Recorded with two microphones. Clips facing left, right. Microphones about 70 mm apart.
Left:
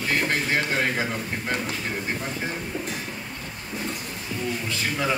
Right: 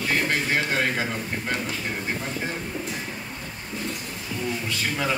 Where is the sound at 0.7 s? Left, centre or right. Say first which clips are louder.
Even; centre.